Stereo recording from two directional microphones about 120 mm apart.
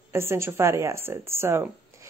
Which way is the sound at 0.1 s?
20° right (ahead or behind).